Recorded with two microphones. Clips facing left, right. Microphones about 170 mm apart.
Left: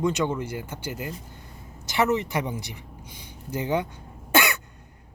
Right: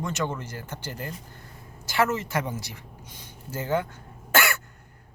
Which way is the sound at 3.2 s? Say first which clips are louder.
Left 4 dB; 15° left (ahead or behind).